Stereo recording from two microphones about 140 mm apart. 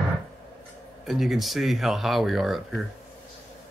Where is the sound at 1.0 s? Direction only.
Centre (ahead or behind).